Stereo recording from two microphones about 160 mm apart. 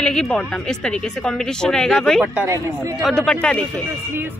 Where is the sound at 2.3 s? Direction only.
20° right (ahead or behind).